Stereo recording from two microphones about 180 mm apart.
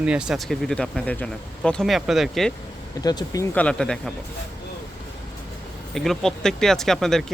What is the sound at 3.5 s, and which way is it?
Speech, 5° left (ahead or behind).